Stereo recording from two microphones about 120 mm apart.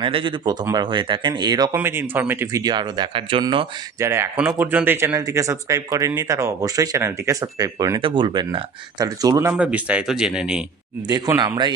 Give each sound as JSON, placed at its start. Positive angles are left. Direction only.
{"t": 0.0, "sound": "speech", "side_deg": -45}
{"t": 1.7, "sound": "speech", "side_deg": -20}
{"t": 2.7, "sound": "speech", "side_deg": -35}
{"t": 4.0, "sound": "speech", "side_deg": -20}
{"t": 8.0, "sound": "speech", "side_deg": -40}
{"t": 9.5, "sound": "speech", "side_deg": -10}
{"t": 11.1, "sound": "speech", "side_deg": -30}